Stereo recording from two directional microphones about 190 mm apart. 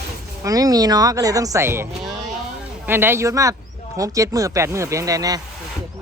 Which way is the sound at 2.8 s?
10° right (ahead or behind).